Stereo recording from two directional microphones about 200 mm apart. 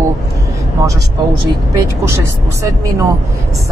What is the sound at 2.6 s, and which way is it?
Speech, 15° right (ahead or behind).